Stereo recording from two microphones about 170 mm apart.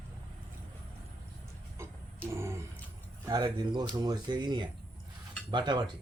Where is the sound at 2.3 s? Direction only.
15° right (ahead or behind).